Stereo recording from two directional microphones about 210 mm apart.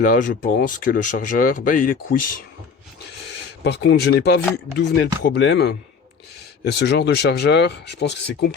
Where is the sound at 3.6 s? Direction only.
55° left (ahead or behind).